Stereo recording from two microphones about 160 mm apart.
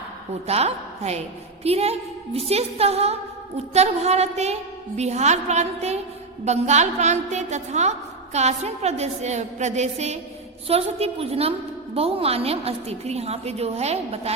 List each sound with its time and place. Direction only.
0.4 s a woman's voice: 40° right (ahead or behind)